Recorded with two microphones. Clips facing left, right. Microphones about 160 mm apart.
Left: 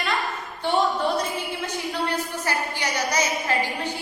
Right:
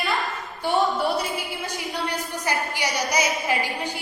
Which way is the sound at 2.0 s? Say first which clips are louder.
Left 1 dB; 15° right (ahead or behind).